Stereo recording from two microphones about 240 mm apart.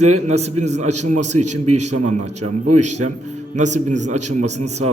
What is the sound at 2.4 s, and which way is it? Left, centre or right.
Speech, right.